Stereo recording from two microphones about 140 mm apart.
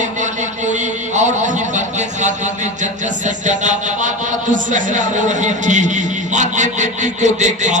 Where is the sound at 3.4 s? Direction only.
60° right (ahead or behind).